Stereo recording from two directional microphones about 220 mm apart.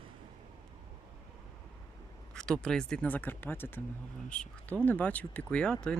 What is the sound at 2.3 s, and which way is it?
Speech, 5° left (ahead or behind).